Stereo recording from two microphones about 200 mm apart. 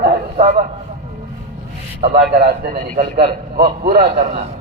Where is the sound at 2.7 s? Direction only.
35° right (ahead or behind).